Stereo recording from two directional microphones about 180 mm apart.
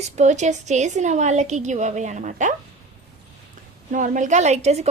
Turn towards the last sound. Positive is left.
turn(degrees=-35)  # may be behind; listen again after turning